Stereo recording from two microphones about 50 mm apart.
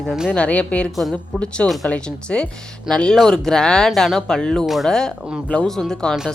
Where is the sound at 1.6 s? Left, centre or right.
Centre.